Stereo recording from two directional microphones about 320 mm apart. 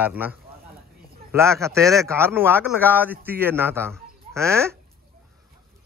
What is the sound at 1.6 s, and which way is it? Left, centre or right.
A man's voice, centre.